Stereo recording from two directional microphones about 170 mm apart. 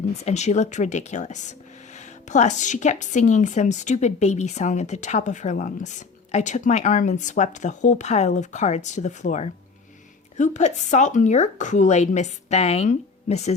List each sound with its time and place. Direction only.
0.3 s a woman's voice: 40° left (ahead or behind)